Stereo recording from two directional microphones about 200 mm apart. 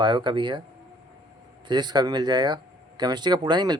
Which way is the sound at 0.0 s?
25° right (ahead or behind).